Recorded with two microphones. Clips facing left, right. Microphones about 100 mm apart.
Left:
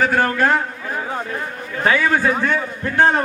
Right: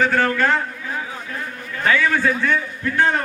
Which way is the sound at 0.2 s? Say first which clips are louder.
Left 1 dB; 15° left (ahead or behind).